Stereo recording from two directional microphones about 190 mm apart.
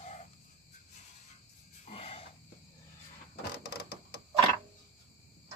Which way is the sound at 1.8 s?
30° left (ahead or behind).